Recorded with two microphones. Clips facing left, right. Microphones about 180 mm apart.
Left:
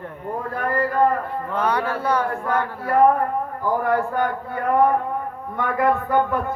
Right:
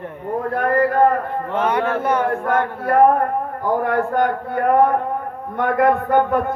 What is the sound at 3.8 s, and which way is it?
A man's voice, 60° right (ahead or behind).